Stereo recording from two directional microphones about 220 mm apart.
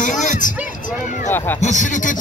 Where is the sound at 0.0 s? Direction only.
35° left (ahead or behind).